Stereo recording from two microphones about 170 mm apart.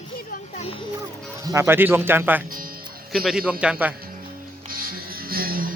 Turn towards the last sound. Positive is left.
turn(degrees=-60)  # may be behind; listen again after turning